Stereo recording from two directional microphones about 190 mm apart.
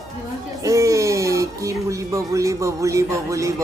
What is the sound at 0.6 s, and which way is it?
Speech, 15° right (ahead or behind).